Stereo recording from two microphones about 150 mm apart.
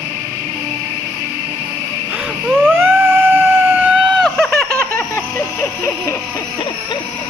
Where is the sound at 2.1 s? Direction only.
5° right (ahead or behind).